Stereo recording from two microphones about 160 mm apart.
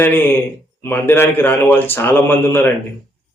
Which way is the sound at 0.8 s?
15° left (ahead or behind).